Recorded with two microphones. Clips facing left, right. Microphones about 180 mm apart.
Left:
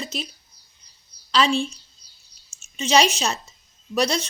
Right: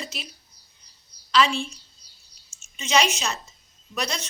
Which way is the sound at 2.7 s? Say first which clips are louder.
Left 4 dB; 35° left (ahead or behind).